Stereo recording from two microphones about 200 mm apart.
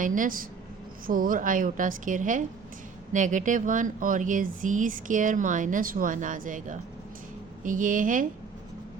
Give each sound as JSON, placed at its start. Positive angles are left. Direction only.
{"t": 0.0, "sound": "speech", "side_deg": -40}